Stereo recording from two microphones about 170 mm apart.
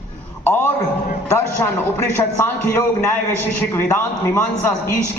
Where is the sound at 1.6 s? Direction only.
10° left (ahead or behind).